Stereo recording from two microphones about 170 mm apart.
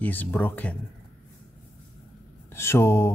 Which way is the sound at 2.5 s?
15° left (ahead or behind).